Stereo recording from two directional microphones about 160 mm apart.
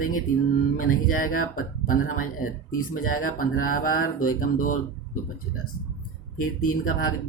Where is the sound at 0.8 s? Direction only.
60° left (ahead or behind).